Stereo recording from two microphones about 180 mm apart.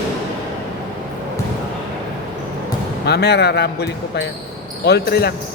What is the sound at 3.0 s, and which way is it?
Speech, 65° left (ahead or behind).